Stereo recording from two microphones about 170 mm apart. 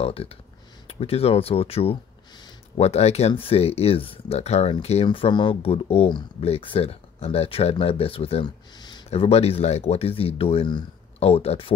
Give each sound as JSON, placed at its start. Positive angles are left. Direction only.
{"t": 0.0, "sound": "speech", "side_deg": 35}
{"t": 9.1, "sound": "speech", "side_deg": 35}